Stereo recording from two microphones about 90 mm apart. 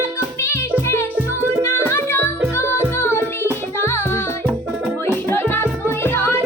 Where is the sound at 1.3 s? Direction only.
25° right (ahead or behind).